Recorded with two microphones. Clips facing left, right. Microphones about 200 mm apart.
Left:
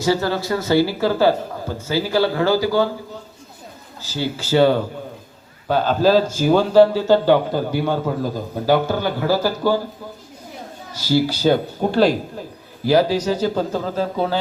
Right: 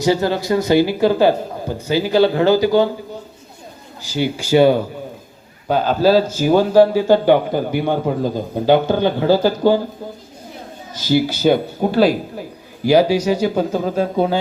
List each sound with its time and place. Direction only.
0.0 s a man's voice: 15° right (ahead or behind)
4.0 s a man's voice: 15° right (ahead or behind)
11.4 s a man's voice: 10° right (ahead or behind)
12.8 s a man's voice: 15° right (ahead or behind)